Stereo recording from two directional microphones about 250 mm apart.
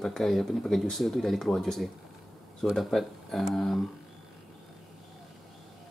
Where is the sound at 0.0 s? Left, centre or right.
Centre.